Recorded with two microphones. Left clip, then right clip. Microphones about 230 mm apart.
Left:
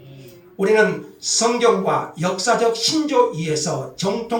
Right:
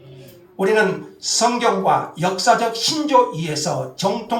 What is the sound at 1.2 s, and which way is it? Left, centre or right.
Speech, right.